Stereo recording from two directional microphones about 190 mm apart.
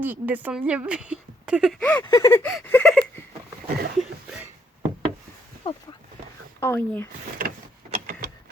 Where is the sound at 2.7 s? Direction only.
5° left (ahead or behind).